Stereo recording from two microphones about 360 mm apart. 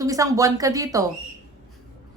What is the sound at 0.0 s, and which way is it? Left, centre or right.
Speech, centre.